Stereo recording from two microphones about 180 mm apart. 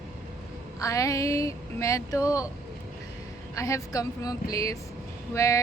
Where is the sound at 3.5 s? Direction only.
15° left (ahead or behind).